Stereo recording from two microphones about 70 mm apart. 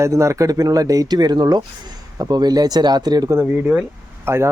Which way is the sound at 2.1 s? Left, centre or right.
Right.